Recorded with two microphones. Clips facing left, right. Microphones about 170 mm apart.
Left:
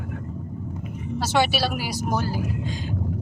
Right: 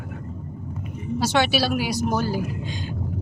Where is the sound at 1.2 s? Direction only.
5° left (ahead or behind).